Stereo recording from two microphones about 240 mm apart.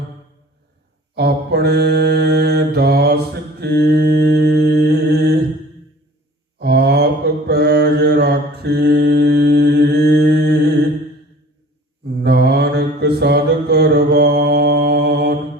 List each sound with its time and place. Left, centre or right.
1.1 s mantra: right
6.6 s mantra: right
12.0 s mantra: right